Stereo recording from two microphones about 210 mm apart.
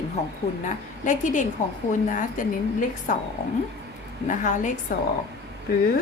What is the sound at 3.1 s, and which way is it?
Speech, 40° left (ahead or behind).